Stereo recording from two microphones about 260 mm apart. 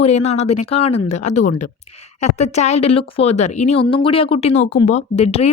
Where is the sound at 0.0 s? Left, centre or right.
Left.